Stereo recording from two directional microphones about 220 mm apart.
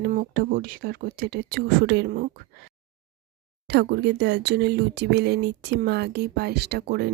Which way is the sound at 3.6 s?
50° right (ahead or behind).